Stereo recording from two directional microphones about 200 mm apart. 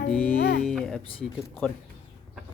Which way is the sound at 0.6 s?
Centre (ahead or behind).